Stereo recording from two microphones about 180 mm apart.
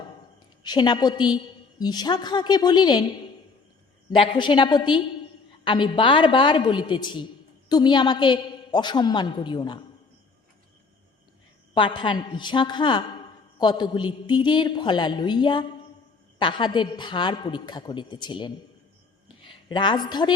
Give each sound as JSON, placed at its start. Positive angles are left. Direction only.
{"t": 0.6, "sound": "a woman's voice", "side_deg": 25}
{"t": 11.7, "sound": "a woman's voice", "side_deg": 25}